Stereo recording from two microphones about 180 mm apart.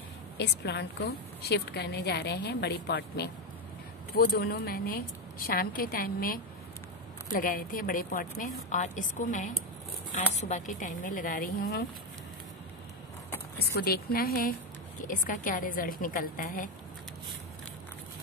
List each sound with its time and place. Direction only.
0.4 s a woman's voice: 70° left (ahead or behind)
4.2 s a woman's voice: 55° left (ahead or behind)
13.7 s a woman's voice: 55° left (ahead or behind)